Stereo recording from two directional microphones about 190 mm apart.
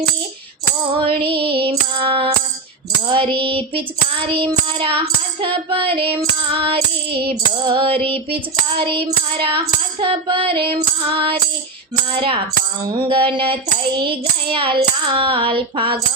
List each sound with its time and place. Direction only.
0.9 s child singing: 25° right (ahead or behind)